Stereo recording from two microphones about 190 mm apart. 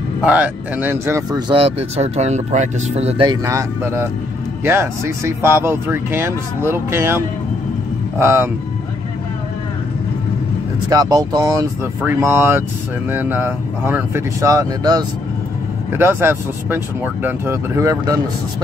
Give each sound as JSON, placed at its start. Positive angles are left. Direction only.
{"t": 0.2, "sound": "speech", "side_deg": -5}
{"t": 1.5, "sound": "speech", "side_deg": -30}
{"t": 3.4, "sound": "speech", "side_deg": -15}
{"t": 10.9, "sound": "speech", "side_deg": -20}